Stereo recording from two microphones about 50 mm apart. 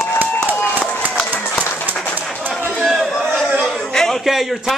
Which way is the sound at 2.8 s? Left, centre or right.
Centre.